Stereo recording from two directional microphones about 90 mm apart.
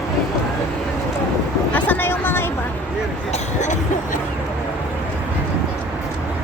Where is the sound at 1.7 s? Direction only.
20° left (ahead or behind).